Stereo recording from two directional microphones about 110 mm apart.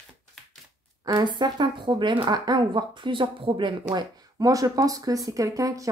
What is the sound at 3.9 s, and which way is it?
Speech, 35° right (ahead or behind).